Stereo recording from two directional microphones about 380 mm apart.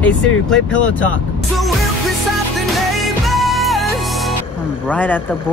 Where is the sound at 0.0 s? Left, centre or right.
Centre.